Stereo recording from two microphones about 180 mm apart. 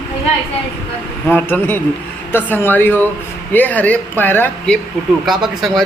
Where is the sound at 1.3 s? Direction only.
10° left (ahead or behind).